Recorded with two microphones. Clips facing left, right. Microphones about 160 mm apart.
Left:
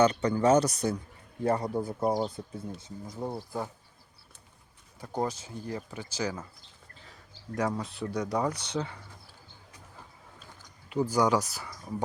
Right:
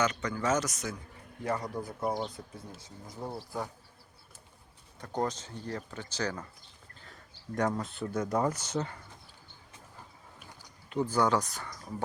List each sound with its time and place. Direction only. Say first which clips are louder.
0.0 s speech: left 7 dB; 30° left (ahead or behind)
2.8 s speech: left 2 dB; 15° left (ahead or behind)
4.9 s speech: left 1 dB; 10° left (ahead or behind); by 8.8 s 10° right (ahead or behind)
10.8 s speech: left 2 dB; 10° left (ahead or behind)